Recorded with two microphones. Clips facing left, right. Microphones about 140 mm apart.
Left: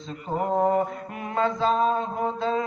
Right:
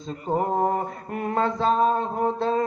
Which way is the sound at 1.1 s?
45° right (ahead or behind).